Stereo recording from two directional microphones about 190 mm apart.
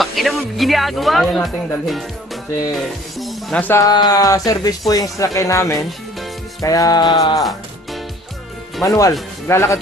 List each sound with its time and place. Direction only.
0.0 s speech: centre (ahead or behind); by 5.9 s 15° left (ahead or behind)
6.6 s music: 20° left (ahead or behind)
8.8 s speech: 15° left (ahead or behind)